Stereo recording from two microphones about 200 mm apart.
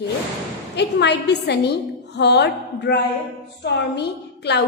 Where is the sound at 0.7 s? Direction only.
60° left (ahead or behind).